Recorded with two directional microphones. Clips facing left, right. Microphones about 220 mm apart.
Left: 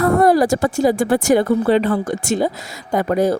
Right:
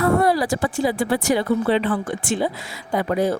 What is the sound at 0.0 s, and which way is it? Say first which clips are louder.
A woman's voice: left 5 dB; 45° left (ahead or behind).